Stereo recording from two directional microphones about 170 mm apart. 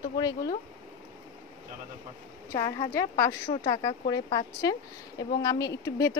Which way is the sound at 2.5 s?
25° left (ahead or behind).